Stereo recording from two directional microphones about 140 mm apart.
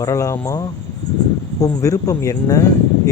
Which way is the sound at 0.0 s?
25° left (ahead or behind).